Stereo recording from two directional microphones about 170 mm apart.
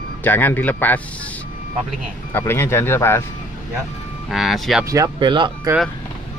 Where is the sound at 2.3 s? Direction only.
15° left (ahead or behind).